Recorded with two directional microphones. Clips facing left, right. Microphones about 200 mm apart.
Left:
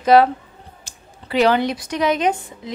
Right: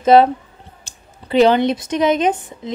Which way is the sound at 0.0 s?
25° right (ahead or behind).